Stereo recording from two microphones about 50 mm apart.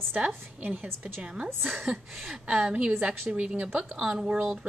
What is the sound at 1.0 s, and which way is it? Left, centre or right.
Speech, centre.